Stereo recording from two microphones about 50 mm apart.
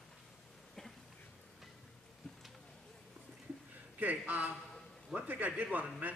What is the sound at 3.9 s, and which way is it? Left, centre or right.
A man's voice, right.